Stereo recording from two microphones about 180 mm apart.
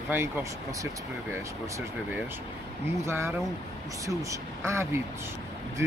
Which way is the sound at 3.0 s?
15° right (ahead or behind).